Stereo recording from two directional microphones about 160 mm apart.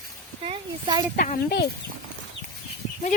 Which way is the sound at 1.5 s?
90° left.